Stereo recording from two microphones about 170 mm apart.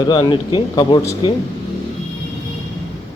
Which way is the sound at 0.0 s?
25° left (ahead or behind).